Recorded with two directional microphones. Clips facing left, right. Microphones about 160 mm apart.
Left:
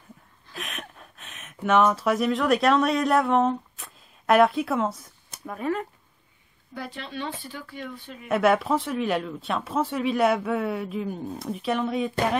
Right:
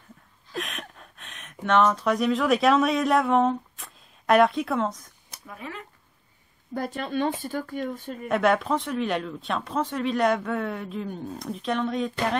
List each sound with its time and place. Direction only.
0.6 s speech: centre (ahead or behind)
5.3 s speech: 45° left (ahead or behind)
6.7 s speech: 45° right (ahead or behind)
8.3 s speech: 5° left (ahead or behind)